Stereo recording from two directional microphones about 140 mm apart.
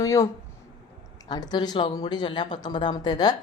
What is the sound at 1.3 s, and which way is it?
Speech, 30° left (ahead or behind).